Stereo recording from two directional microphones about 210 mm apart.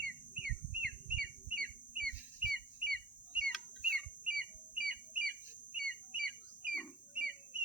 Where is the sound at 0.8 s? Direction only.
45° right (ahead or behind).